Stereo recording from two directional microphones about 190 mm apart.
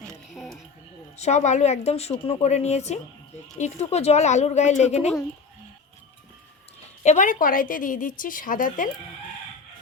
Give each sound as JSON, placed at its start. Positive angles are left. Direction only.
{"t": 0.0, "sound": "a sound", "side_deg": 0}
{"t": 1.1, "sound": "a woman's voice", "side_deg": 35}
{"t": 7.0, "sound": "a woman's voice", "side_deg": 40}